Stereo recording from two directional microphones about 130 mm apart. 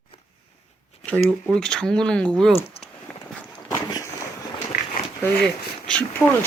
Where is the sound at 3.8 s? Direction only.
30° left (ahead or behind).